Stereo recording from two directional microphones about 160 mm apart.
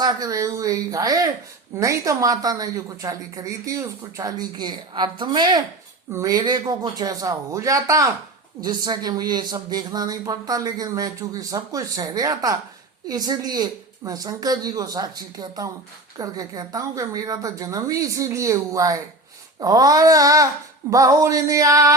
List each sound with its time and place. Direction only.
0.0 s speech: 25° right (ahead or behind)